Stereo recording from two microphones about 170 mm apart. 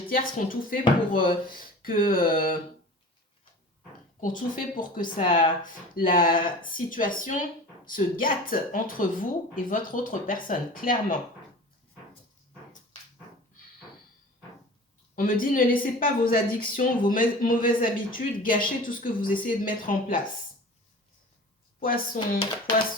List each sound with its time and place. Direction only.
0.1 s a woman's voice: 55° left (ahead or behind)
4.2 s speech: 50° left (ahead or behind)
15.1 s a woman's voice: 55° left (ahead or behind)
21.8 s a woman's voice: 55° left (ahead or behind)